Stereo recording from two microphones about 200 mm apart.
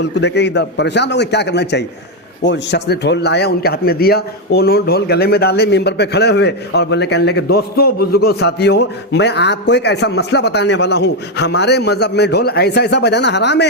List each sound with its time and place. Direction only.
0.2 s a man's voice: 60° left (ahead or behind)